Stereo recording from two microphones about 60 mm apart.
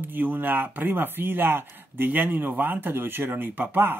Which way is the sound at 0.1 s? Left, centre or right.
Right.